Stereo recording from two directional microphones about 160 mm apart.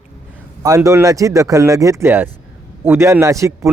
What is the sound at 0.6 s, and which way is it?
A man's voice, 20° right (ahead or behind).